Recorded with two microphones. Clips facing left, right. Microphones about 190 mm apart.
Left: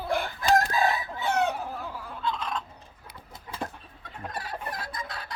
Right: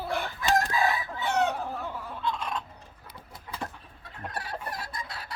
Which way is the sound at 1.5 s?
5° left (ahead or behind).